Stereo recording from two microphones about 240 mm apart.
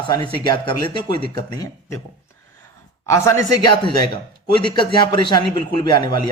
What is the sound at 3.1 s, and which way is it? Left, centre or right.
Speech, centre.